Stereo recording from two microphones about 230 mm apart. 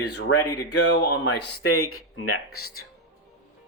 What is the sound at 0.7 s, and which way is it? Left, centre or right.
Speech, left.